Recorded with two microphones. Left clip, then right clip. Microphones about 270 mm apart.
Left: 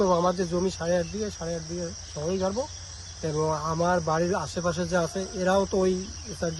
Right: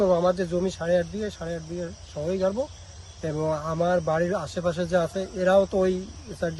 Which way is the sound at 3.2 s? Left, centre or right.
Centre.